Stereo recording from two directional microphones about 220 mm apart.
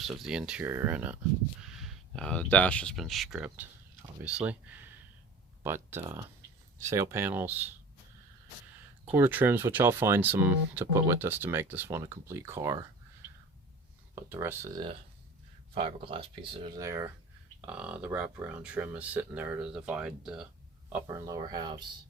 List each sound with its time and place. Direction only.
0.0 s speech: centre (ahead or behind)
9.0 s speech: 10° right (ahead or behind)
14.3 s speech: 10° right (ahead or behind)
20.9 s speech: 15° right (ahead or behind)